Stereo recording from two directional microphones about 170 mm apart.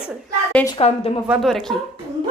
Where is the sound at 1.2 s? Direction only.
5° right (ahead or behind).